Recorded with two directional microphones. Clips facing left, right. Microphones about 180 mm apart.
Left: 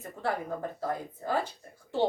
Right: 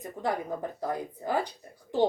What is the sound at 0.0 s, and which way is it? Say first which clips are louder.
Speech: right 2 dB; 15° right (ahead or behind).